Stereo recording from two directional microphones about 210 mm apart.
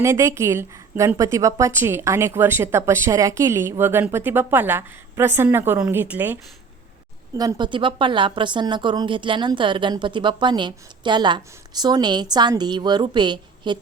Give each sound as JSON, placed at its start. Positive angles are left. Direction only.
{"t": 0.0, "sound": "a woman's voice", "side_deg": -15}
{"t": 7.3, "sound": "a woman's voice", "side_deg": -20}